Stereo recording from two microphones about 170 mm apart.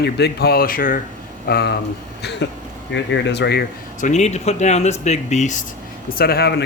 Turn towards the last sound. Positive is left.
turn(degrees=70)  # may be behind; listen again after turning